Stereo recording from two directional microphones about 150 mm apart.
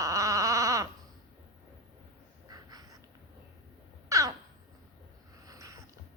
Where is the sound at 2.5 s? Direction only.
25° right (ahead or behind).